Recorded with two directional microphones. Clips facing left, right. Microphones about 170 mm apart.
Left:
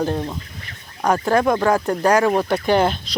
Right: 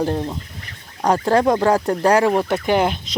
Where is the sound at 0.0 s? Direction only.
25° right (ahead or behind).